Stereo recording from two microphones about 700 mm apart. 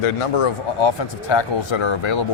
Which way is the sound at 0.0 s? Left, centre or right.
Left.